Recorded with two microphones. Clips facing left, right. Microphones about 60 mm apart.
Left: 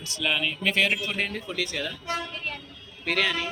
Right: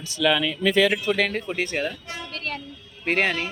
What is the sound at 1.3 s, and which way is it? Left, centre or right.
Speech, right.